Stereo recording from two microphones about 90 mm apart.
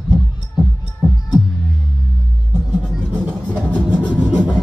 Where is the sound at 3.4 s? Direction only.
15° left (ahead or behind).